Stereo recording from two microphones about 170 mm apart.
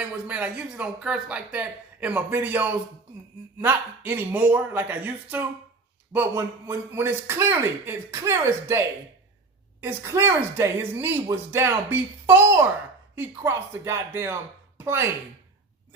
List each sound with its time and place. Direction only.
0.0 s speech: 10° right (ahead or behind)